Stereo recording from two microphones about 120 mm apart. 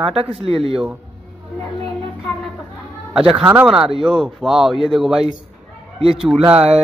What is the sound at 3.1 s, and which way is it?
Speech, 5° right (ahead or behind).